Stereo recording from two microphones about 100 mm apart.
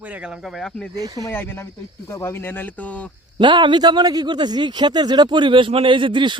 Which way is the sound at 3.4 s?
50° right (ahead or behind).